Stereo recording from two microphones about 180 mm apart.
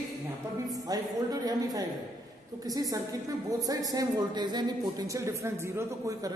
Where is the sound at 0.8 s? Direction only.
20° right (ahead or behind).